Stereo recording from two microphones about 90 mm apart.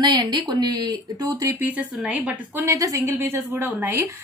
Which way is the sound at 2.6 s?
35° right (ahead or behind).